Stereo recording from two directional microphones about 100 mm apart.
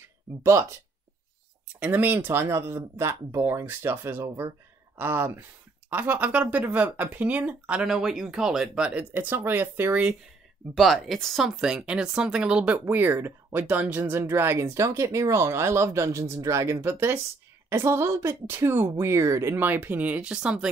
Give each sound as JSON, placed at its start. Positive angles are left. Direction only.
{"t": 0.4, "sound": "speech", "side_deg": -30}
{"t": 1.8, "sound": "speech", "side_deg": -15}
{"t": 10.7, "sound": "speech", "side_deg": 0}